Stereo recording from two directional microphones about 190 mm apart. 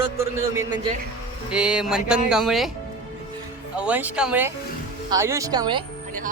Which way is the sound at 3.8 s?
10° right (ahead or behind).